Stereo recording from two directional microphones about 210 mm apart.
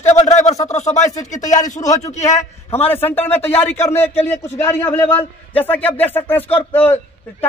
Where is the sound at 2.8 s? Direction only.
10° left (ahead or behind).